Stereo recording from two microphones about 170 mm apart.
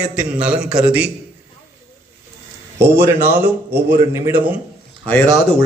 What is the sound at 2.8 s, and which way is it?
A man's voice, 15° right (ahead or behind).